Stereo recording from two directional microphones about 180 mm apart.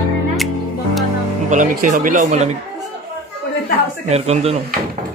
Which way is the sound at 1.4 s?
45° right (ahead or behind).